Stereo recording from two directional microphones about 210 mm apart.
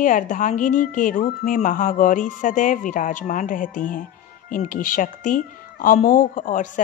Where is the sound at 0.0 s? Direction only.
40° left (ahead or behind).